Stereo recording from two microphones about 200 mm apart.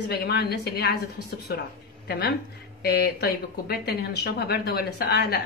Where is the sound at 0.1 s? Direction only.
55° left (ahead or behind).